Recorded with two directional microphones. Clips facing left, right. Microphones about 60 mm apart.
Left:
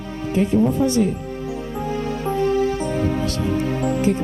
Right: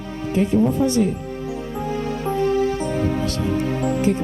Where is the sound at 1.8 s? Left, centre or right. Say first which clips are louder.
Even; left.